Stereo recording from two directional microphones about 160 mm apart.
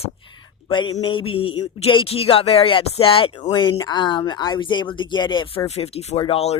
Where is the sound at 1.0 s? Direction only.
35° left (ahead or behind).